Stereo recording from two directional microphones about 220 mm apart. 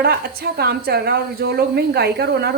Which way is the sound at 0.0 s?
45° right (ahead or behind).